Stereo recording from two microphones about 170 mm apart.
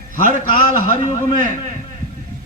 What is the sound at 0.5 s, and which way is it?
Speech, 45° left (ahead or behind).